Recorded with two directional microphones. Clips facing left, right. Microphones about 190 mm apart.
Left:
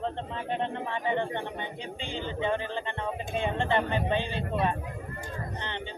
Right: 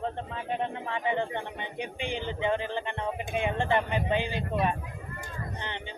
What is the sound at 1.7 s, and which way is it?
Speech, 15° right (ahead or behind).